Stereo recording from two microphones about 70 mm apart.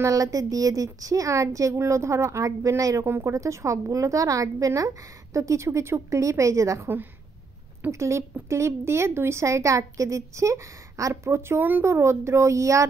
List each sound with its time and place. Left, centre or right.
0.0 s a woman's voice: right
7.9 s a woman's voice: right